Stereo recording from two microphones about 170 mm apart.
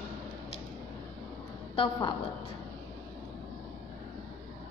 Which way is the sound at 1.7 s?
25° left (ahead or behind).